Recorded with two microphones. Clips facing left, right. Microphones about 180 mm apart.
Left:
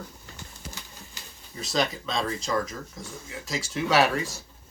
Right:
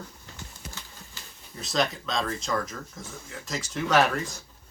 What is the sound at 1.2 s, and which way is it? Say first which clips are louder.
Pigeon: left 1 dB; 15° left (ahead or behind).